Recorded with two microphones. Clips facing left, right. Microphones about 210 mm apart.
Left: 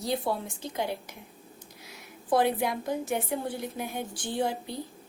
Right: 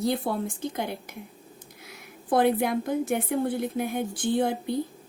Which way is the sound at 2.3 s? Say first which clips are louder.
Right 3 dB; 55° right (ahead or behind).